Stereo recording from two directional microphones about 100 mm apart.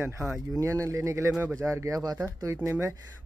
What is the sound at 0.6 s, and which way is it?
Speech, 30° right (ahead or behind).